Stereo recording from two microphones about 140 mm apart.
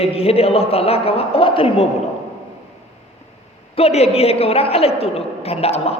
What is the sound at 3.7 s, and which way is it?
A man's voice, 45° left (ahead or behind).